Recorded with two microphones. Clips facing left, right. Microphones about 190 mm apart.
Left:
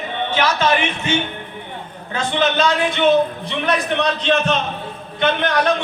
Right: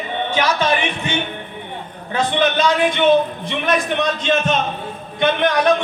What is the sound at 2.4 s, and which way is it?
Speech, 55° right (ahead or behind).